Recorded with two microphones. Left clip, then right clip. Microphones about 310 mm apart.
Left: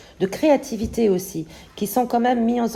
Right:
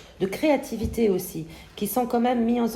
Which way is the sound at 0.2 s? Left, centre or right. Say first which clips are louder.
Left 5 dB; left.